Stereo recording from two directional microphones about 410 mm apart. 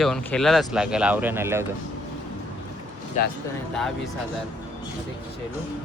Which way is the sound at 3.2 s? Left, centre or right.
Centre.